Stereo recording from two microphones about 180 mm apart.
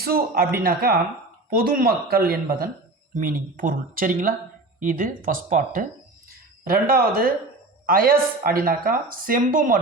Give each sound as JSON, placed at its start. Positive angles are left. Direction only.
{"t": 0.0, "sound": "speech", "side_deg": -55}
{"t": 6.7, "sound": "speech", "side_deg": -55}